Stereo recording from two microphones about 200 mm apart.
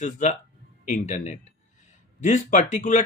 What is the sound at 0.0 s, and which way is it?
Speech, 35° left (ahead or behind).